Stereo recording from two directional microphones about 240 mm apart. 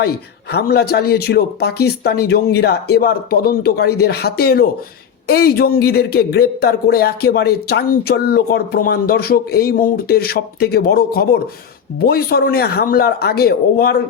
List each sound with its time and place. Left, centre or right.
0.5 s speech: left